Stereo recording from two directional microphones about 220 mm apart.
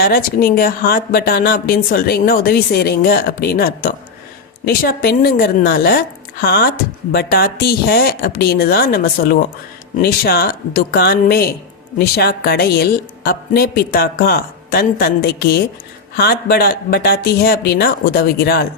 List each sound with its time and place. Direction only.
0.0 s a woman's voice: 45° left (ahead or behind)